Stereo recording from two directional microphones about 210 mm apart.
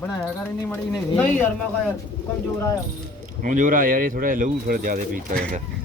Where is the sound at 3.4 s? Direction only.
40° right (ahead or behind).